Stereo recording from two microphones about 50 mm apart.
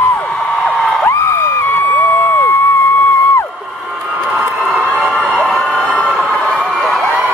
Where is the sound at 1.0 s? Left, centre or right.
Left.